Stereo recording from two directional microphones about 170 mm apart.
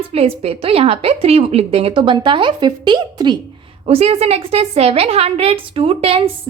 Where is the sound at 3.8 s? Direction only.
35° right (ahead or behind).